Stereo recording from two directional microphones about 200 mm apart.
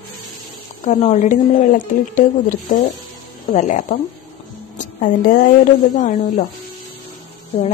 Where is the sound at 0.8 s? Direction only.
35° left (ahead or behind).